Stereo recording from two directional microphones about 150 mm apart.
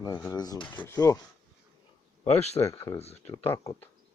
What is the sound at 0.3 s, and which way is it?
Speech, 25° left (ahead or behind).